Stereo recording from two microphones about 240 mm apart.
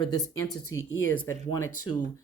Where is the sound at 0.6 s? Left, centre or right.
Left.